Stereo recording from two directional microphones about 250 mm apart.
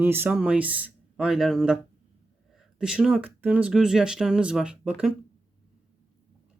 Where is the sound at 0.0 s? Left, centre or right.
Centre.